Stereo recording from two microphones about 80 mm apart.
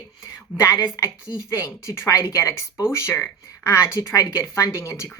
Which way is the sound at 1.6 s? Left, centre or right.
Left.